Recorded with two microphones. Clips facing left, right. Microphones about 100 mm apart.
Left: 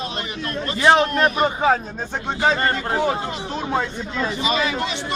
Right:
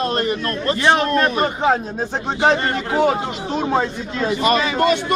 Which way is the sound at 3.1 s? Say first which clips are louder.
Right 3 dB; 20° right (ahead or behind).